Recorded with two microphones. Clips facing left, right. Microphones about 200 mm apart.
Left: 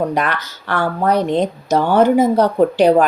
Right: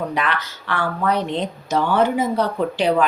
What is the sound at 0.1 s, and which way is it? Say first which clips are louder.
Speech: left 4 dB; 45° left (ahead or behind).